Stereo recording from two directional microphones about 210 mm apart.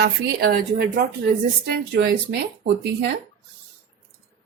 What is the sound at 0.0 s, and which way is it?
A woman's voice, 50° right (ahead or behind).